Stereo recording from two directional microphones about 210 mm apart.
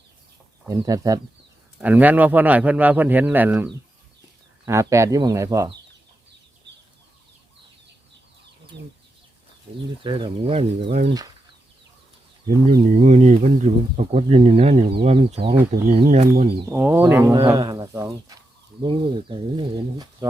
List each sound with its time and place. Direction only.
0.7 s speech: 15° right (ahead or behind)
10.0 s speech: 25° right (ahead or behind)
12.5 s speech: 40° right (ahead or behind)
16.6 s speech: 10° right (ahead or behind)